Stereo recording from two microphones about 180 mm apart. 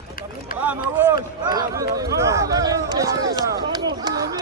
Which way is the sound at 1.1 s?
25° right (ahead or behind).